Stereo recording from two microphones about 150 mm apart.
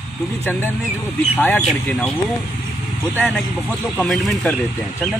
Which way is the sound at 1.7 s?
Centre (ahead or behind).